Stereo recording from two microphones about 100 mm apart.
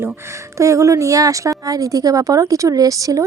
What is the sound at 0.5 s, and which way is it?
Speech, 35° right (ahead or behind).